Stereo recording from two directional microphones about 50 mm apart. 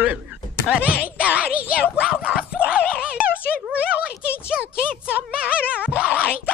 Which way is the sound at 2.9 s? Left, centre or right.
Centre.